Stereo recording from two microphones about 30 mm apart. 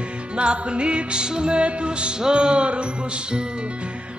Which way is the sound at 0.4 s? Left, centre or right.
Right.